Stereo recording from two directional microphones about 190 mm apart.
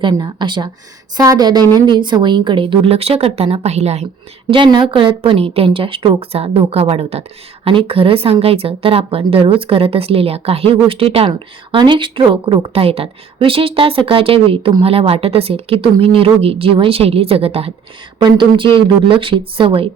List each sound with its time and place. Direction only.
0.0 s speech: 25° right (ahead or behind)